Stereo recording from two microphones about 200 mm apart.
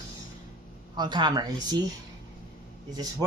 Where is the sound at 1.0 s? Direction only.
20° right (ahead or behind).